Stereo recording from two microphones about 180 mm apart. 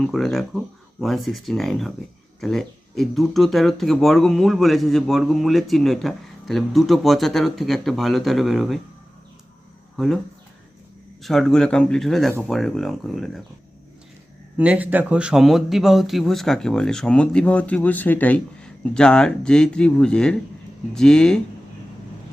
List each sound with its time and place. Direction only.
0.0 s speech: centre (ahead or behind)
11.2 s speech: centre (ahead or behind)
14.6 s speech: 5° right (ahead or behind)